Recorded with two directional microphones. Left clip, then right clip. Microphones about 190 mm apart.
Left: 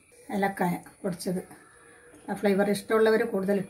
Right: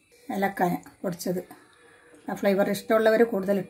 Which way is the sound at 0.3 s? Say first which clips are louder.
Right 2 dB; 55° right (ahead or behind).